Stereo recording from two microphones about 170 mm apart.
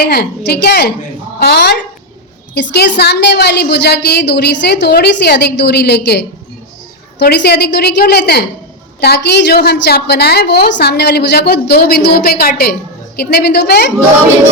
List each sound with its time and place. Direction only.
0.0 s a woman's voice: 70° left (ahead or behind)
2.6 s a woman's voice: 90° left; by 13.9 s 70° left (ahead or behind)